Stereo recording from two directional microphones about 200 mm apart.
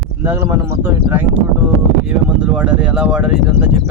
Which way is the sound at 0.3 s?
10° right (ahead or behind).